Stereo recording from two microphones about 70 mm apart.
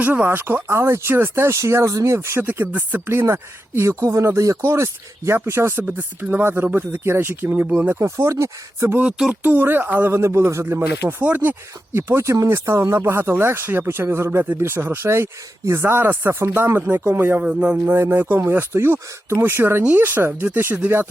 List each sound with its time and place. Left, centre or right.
0.0 s speech: right
1.5 s speech: right
2.4 s speech: right
7.9 s speech: right
9.3 s speech: right
10.1 s speech: right
11.9 s speech: right
17.4 s speech: centre
17.9 s speech: right